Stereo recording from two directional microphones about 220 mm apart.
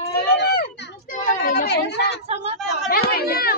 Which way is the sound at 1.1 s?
40° left (ahead or behind).